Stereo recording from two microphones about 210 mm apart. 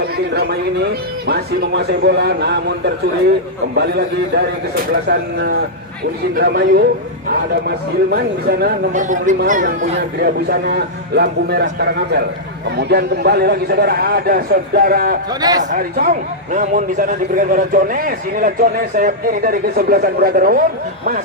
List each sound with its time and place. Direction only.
1.3 s a man's voice: 50° right (ahead or behind)
15.3 s a man's voice: 20° right (ahead or behind)
15.7 s a man's voice: 45° right (ahead or behind)